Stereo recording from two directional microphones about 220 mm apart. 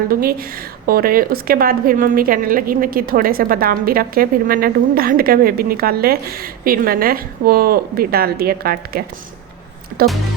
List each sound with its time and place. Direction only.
0.1 s a woman's voice: 40° right (ahead or behind)
10.0 s music: 45° right (ahead or behind)